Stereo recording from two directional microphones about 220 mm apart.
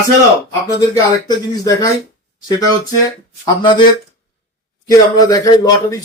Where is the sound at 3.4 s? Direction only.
20° left (ahead or behind).